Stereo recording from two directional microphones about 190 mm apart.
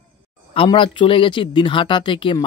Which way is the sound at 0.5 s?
30° left (ahead or behind).